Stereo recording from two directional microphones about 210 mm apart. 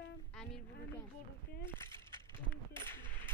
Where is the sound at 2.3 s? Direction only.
10° left (ahead or behind).